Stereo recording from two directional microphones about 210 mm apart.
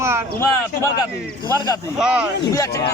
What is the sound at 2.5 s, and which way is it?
Speech, 15° left (ahead or behind).